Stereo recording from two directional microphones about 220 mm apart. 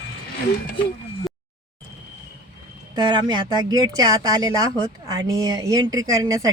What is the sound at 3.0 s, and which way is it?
Speech, 20° right (ahead or behind).